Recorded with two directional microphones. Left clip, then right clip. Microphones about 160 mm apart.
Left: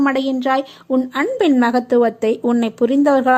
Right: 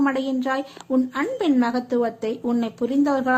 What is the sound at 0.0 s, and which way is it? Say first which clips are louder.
Speech: left 5 dB; 35° left (ahead or behind).